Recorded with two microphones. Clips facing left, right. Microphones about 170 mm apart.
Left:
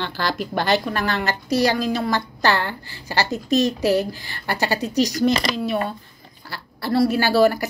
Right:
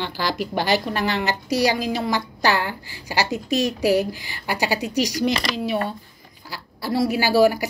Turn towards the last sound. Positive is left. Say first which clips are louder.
# even
turn(degrees=-10)  # may be behind; listen again after turning